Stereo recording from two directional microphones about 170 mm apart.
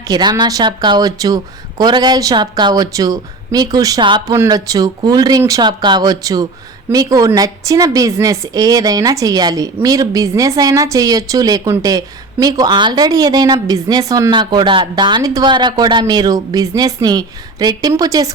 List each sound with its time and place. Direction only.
0.1 s a woman's voice: 25° right (ahead or behind)